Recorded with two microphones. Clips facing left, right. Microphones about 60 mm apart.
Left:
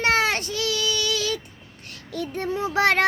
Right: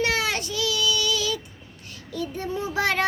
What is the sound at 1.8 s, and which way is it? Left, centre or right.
Child singing, left.